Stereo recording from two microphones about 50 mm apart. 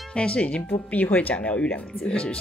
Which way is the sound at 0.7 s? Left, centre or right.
Left.